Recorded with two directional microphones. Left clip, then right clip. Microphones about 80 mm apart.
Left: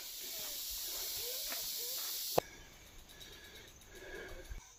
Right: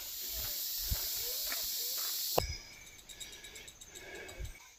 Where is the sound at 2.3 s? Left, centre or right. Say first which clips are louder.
Even; left.